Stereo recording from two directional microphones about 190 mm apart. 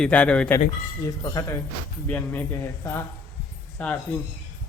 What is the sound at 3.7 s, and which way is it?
Speech, 10° left (ahead or behind).